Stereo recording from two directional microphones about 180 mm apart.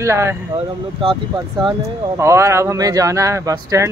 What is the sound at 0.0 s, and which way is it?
Speech, 15° right (ahead or behind).